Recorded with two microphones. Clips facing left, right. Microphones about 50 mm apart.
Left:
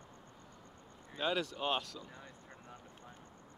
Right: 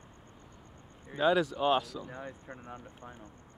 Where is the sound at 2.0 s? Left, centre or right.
Right.